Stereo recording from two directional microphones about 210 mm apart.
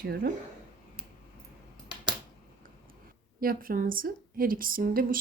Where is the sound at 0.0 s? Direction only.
50° right (ahead or behind).